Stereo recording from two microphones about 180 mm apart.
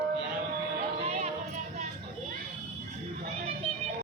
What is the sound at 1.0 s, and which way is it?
Music, 35° right (ahead or behind).